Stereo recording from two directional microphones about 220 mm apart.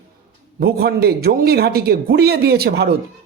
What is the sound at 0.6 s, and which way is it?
Speech, 45° right (ahead or behind).